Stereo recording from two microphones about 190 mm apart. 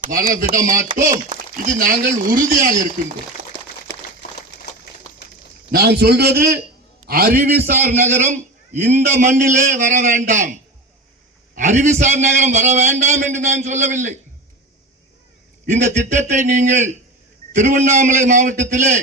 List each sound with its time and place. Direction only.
0.1 s speech: 45° right (ahead or behind)
3.5 s a sound: 25° right (ahead or behind)
5.7 s a man's voice: 60° right (ahead or behind)
7.9 s a man's voice: 40° right (ahead or behind)
11.5 s a man's voice: 40° right (ahead or behind)
15.6 s a man's voice: 40° right (ahead or behind)